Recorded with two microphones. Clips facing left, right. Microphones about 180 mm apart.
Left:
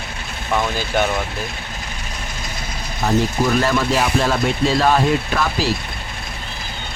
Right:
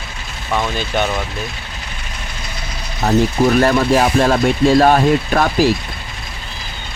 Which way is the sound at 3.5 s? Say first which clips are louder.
Right 5 dB; 50° right (ahead or behind).